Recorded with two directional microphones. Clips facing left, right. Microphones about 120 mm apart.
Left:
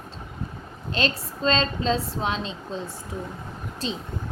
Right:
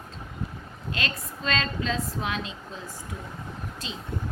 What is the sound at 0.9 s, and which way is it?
A woman's voice, 30° left (ahead or behind).